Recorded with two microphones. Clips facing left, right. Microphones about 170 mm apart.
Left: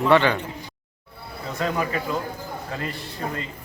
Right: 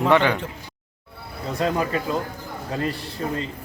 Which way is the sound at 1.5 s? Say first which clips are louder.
Right 2 dB; 35° right (ahead or behind).